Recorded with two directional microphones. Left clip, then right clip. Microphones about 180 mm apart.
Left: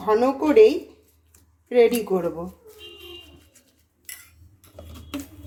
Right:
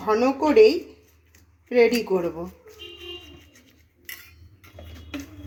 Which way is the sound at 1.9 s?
5° right (ahead or behind).